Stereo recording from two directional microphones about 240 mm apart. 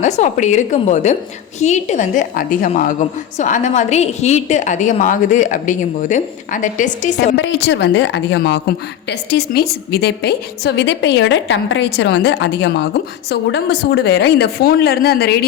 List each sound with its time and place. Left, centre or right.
0.0 s a woman's voice: left
7.3 s a woman's voice: left